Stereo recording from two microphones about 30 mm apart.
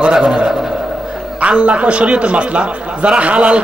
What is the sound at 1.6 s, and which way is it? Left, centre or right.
A man's voice, right.